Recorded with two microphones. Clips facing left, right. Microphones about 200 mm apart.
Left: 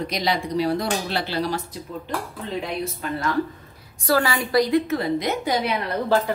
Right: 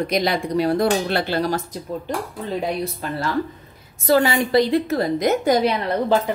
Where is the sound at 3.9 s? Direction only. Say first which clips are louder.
Right 4 dB; 20° right (ahead or behind).